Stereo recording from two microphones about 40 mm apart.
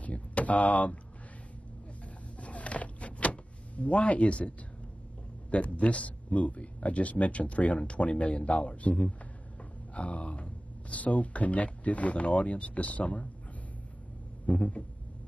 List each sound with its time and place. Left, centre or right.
0.0 s a sound: left
2.3 s power windows: left
5.5 s a man's voice: left
14.4 s a man's voice: left